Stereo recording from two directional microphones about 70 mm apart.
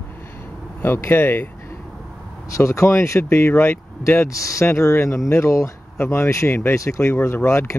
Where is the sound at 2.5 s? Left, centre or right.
Left.